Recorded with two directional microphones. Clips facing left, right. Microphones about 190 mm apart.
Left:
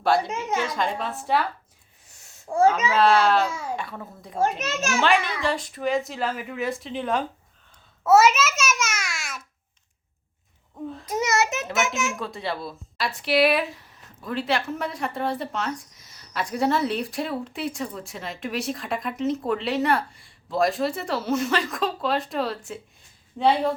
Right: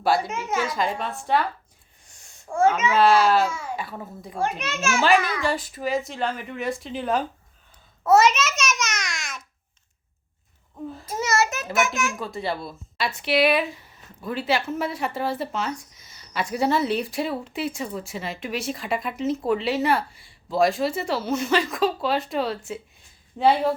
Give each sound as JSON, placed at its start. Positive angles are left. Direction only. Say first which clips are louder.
{"t": 0.3, "sound": "speech", "louder": "even", "side_deg": 30}
{"t": 0.6, "sound": "speech", "louder": "right 1 dB", "side_deg": -5}
{"t": 2.0, "sound": "a sound", "louder": "even", "side_deg": 5}
{"t": 2.5, "sound": "speech", "louder": "left 1 dB", "side_deg": 35}
{"t": 2.9, "sound": "speech", "louder": "right 1 dB", "side_deg": 0}
{"t": 4.6, "sound": "speech", "louder": "even", "side_deg": 40}
{"t": 4.9, "sound": "a child's voice", "louder": "right 2 dB", "side_deg": -5}
{"t": 11.0, "sound": "a child's voice", "louder": "even", "side_deg": 20}
{"t": 12.1, "sound": "speech", "louder": "right 1 dB", "side_deg": 0}